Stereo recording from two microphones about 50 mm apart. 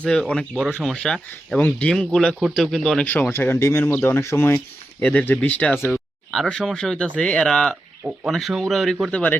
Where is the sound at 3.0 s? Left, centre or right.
Left.